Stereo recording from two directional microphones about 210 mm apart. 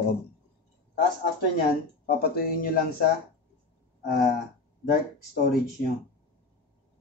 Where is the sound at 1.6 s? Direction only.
50° left (ahead or behind).